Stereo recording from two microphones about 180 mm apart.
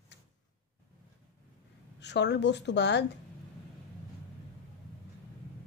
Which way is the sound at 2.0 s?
70° left (ahead or behind).